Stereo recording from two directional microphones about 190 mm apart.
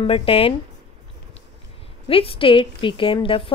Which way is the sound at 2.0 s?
30° left (ahead or behind).